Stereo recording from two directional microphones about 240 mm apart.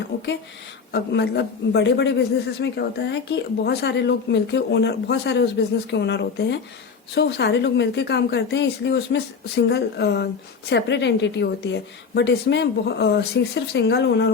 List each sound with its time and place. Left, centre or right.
0.9 s a man's voice: left